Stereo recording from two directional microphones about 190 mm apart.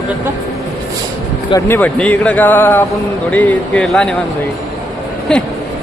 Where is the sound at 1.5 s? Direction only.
10° left (ahead or behind).